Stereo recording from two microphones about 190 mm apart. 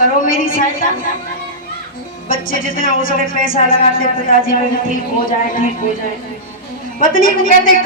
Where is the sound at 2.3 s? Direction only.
50° left (ahead or behind).